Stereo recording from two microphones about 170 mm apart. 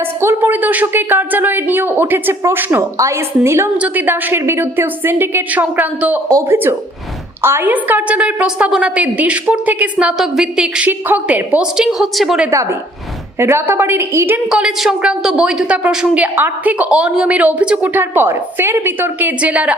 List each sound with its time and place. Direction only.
0.2 s a woman's voice: 15° right (ahead or behind)
13.4 s a woman's voice: 15° right (ahead or behind)
14.5 s a woman's voice: 5° right (ahead or behind)